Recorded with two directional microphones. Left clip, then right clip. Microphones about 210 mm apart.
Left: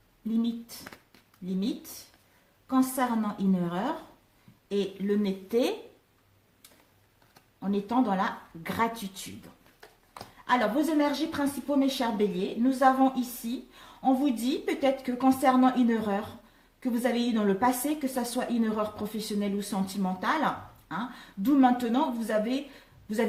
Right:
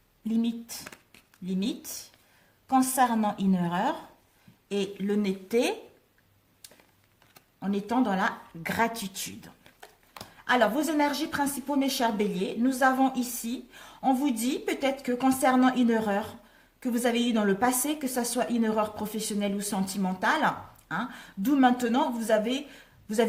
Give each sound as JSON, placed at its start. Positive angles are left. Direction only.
{"t": 0.3, "sound": "a woman's voice", "side_deg": -40}
{"t": 2.6, "sound": "a woman's voice", "side_deg": -45}
{"t": 7.6, "sound": "a woman's voice", "side_deg": -40}
{"t": 10.2, "sound": "a woman's voice", "side_deg": -35}